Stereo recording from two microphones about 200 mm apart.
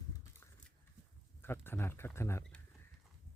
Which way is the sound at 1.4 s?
10° left (ahead or behind).